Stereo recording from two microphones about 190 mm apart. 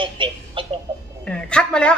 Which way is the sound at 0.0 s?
25° right (ahead or behind).